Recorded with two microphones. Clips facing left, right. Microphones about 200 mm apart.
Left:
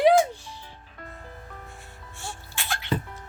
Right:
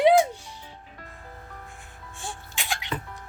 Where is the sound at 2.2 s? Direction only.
15° right (ahead or behind).